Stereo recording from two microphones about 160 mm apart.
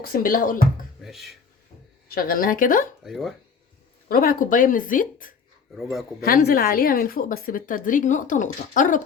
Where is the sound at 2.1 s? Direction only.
65° left (ahead or behind).